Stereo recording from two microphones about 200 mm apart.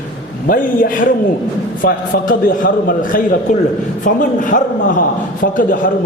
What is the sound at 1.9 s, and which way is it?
Speech, 45° left (ahead or behind).